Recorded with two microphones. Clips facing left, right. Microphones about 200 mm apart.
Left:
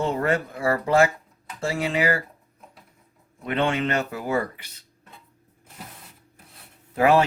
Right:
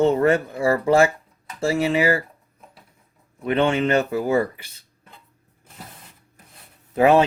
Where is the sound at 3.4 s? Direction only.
25° right (ahead or behind).